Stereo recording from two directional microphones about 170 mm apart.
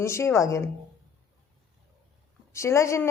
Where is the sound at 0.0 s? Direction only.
15° left (ahead or behind).